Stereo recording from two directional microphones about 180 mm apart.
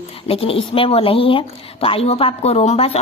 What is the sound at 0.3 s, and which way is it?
Speech, 30° left (ahead or behind).